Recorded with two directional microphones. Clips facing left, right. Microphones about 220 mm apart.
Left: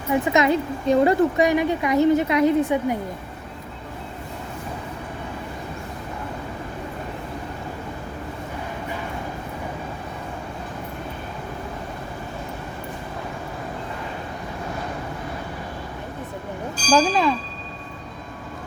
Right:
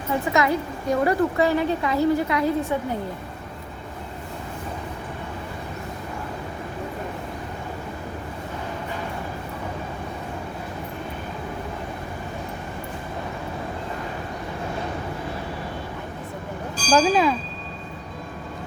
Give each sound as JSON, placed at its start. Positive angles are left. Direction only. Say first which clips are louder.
{"t": 0.1, "sound": "a woman's voice", "louder": "left 3 dB", "side_deg": 20}
{"t": 16.9, "sound": "speech", "louder": "even", "side_deg": 0}